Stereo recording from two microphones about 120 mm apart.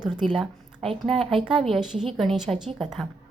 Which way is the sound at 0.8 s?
55° right (ahead or behind).